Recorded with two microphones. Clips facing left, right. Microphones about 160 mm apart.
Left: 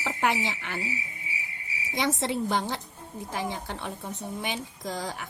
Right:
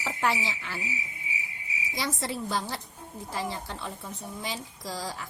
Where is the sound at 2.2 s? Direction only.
20° left (ahead or behind).